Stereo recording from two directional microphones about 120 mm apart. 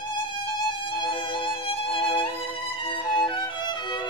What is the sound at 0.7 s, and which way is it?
Violin, 40° left (ahead or behind).